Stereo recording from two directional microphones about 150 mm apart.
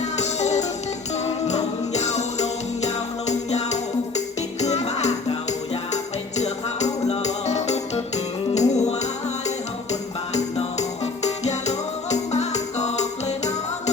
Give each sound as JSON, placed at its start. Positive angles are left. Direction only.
{"t": 0.0, "sound": "music", "side_deg": 50}